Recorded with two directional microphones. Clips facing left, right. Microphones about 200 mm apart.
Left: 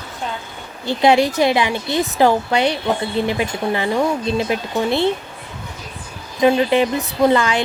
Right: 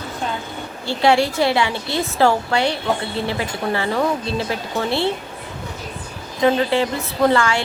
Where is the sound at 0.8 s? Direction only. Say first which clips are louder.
Left 2 dB; 20° left (ahead or behind).